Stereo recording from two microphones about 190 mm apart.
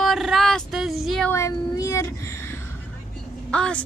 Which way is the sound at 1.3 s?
15° left (ahead or behind).